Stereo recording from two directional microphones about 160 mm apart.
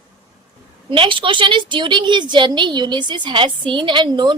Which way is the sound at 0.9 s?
30° right (ahead or behind).